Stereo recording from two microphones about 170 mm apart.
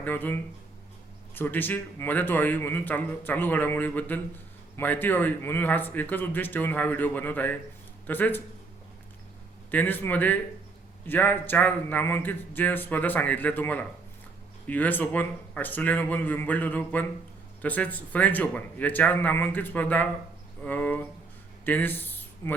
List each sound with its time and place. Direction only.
0.0 s a man's voice: 10° left (ahead or behind)
9.7 s a man's voice: 10° left (ahead or behind)